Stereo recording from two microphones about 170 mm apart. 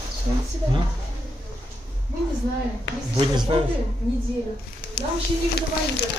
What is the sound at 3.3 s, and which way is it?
Speech, 25° right (ahead or behind).